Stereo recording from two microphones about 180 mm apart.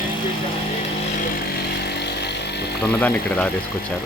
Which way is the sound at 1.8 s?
65° left (ahead or behind).